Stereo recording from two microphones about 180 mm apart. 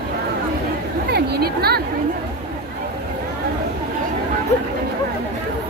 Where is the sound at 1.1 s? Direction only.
60° right (ahead or behind).